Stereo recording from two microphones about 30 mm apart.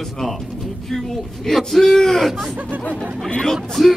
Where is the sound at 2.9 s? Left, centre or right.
Right.